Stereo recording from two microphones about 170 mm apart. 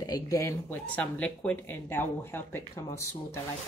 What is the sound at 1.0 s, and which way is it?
Speech, 5° left (ahead or behind).